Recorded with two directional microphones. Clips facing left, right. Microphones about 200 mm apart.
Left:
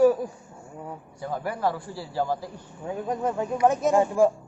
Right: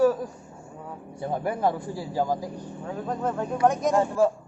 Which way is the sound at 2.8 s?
10° left (ahead or behind).